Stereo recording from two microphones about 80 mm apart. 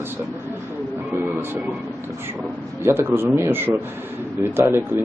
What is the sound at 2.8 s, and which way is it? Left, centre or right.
Speech, right.